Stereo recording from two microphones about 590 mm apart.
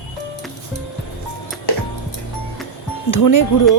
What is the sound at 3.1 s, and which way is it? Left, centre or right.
Speech, left.